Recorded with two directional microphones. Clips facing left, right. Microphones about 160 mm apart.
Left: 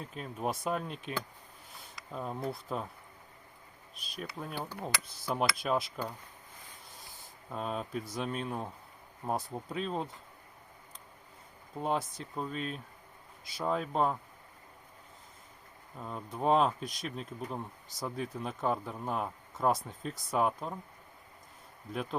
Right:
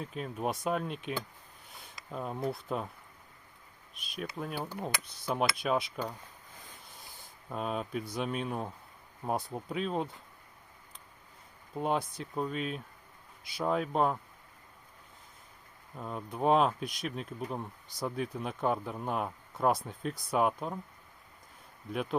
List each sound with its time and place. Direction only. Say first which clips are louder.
0.1 s speech: even; 5° right (ahead or behind)
4.4 s speech: right 2 dB; 5° right (ahead or behind)
4.7 s speech: right 1 dB; 20° right (ahead or behind)
5.5 s speech: right 1 dB; centre (ahead or behind)
7.5 s speech: right 2 dB; 5° right (ahead or behind)
11.8 s speech: right 1 dB; centre (ahead or behind)
16.0 s speech: right 2 dB; 5° right (ahead or behind)